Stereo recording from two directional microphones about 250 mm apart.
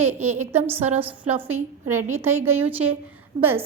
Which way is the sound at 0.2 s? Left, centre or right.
Right.